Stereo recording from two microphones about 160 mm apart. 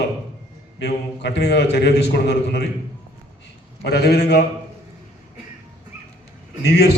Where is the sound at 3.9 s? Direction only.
85° left.